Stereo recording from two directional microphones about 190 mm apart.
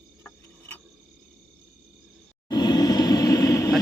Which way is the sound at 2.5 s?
20° left (ahead or behind).